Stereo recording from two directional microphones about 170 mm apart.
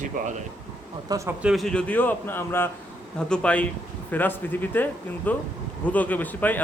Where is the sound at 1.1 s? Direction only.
20° right (ahead or behind).